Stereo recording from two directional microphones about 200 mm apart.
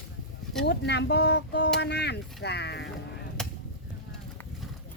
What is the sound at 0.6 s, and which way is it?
Speech, 55° left (ahead or behind).